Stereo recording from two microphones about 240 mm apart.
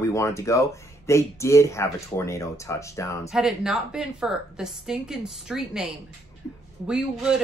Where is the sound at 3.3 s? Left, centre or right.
Centre.